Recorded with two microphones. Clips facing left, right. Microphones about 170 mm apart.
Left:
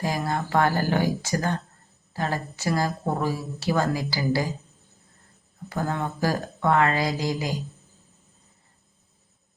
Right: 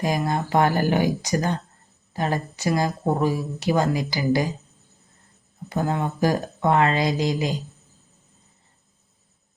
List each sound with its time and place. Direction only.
0.0 s speech: 20° right (ahead or behind)
5.6 s speech: 20° right (ahead or behind)